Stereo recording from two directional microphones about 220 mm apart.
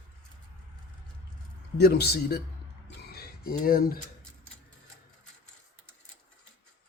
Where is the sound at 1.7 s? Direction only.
45° left (ahead or behind).